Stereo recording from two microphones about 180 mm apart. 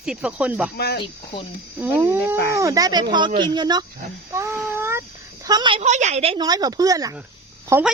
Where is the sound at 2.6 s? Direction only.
20° right (ahead or behind).